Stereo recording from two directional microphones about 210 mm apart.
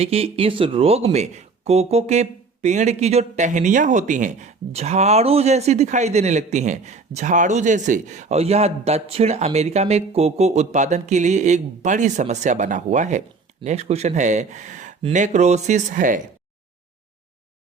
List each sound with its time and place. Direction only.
0.0 s speech: 30° right (ahead or behind)